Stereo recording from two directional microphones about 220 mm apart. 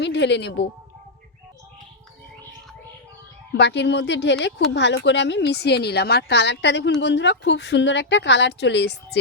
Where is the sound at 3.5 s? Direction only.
50° left (ahead or behind).